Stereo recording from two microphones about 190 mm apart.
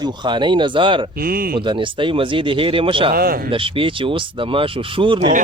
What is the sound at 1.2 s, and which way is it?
Speech, 50° right (ahead or behind).